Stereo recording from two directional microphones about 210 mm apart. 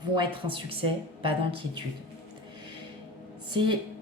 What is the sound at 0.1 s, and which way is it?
Speech, 25° right (ahead or behind).